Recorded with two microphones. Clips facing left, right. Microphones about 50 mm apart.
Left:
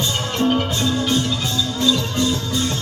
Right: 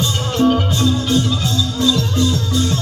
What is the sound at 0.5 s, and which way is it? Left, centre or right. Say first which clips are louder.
Music: right 3 dB; left.